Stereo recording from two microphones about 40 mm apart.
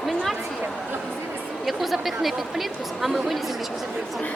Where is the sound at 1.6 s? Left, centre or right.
Centre.